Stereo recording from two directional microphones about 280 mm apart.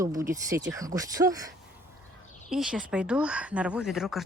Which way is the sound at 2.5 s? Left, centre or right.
Centre.